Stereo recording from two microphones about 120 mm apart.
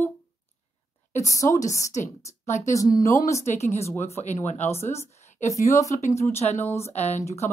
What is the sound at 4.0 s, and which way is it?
Speech, 75° left (ahead or behind).